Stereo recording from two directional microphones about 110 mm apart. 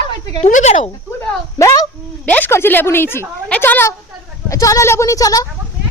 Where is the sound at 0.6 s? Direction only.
90° left.